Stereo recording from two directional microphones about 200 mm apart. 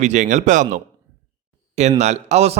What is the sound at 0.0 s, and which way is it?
Speech, 35° right (ahead or behind).